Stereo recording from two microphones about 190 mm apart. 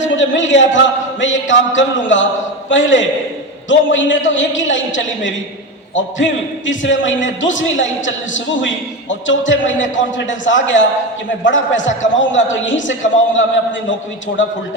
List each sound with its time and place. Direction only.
0.2 s a man's voice: 80° left